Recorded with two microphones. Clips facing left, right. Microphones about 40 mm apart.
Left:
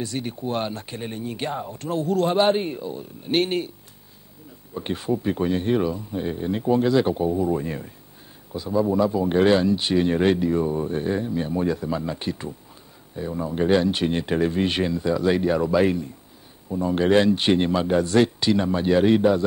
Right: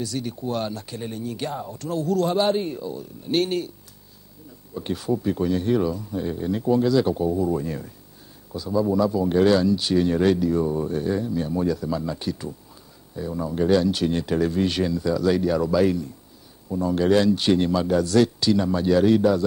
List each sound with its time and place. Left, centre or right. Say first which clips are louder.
0.0 s speech: even; left
4.7 s speech: even; left